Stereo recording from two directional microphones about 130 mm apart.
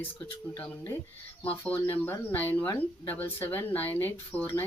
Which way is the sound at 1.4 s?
15° left (ahead or behind).